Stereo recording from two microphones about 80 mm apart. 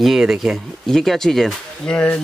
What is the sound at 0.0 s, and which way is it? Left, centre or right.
Speech, centre.